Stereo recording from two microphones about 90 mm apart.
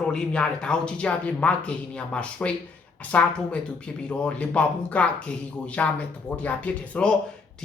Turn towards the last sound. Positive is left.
turn(degrees=15)  # may be behind; listen again after turning